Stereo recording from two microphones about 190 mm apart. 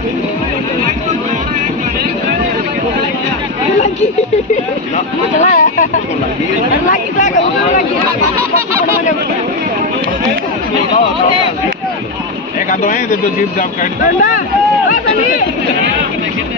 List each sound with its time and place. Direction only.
4.9 s speech: 40° left (ahead or behind)
6.9 s speech: 40° left (ahead or behind)